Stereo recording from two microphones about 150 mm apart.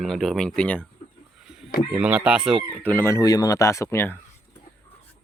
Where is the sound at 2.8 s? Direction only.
15° left (ahead or behind).